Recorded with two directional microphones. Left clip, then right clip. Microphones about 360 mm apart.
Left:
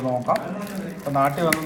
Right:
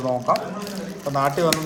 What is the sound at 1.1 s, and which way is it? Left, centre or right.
Speech, centre.